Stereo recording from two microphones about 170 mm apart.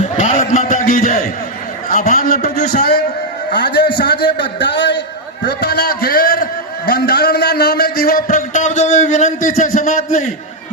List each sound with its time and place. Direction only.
0.2 s a sound: 45° left (ahead or behind)
1.9 s a man's voice: 45° left (ahead or behind)
3.5 s a man's voice: 75° left (ahead or behind)
5.5 s a man's voice: 70° left (ahead or behind); by 10.2 s 50° left (ahead or behind)